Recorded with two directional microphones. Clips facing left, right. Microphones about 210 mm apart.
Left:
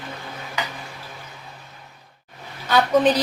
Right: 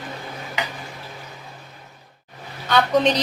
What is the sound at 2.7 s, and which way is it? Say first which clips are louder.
Speech: left 1 dB; 5° left (ahead or behind).